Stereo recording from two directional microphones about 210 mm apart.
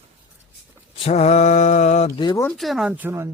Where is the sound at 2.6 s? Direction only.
Centre (ahead or behind).